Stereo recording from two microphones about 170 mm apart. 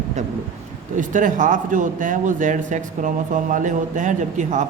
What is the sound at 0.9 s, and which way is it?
Speech, 50° right (ahead or behind).